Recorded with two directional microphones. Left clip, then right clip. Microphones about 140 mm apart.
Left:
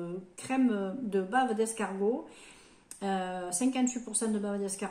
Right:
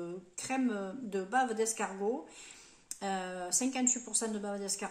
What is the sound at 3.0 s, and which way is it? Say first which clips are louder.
A woman's voice: left 3 dB; 10° right (ahead or behind).